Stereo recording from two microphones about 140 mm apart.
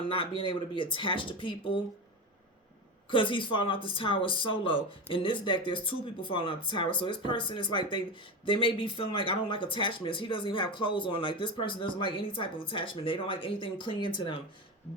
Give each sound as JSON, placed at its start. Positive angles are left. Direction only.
{"t": 0.1, "sound": "speech", "side_deg": 40}
{"t": 3.1, "sound": "speech", "side_deg": 35}